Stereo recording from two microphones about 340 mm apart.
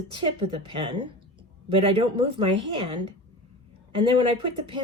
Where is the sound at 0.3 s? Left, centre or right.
Centre.